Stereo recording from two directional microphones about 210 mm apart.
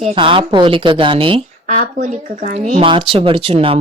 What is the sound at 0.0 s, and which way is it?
Speech, 25° right (ahead or behind).